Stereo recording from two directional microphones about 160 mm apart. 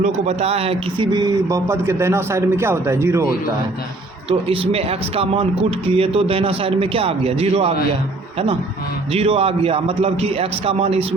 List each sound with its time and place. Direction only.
0.0 s speech: 40° right (ahead or behind); by 3.3 s 15° right (ahead or behind)
4.3 s speech: 35° right (ahead or behind)
9.1 s speech: 35° right (ahead or behind)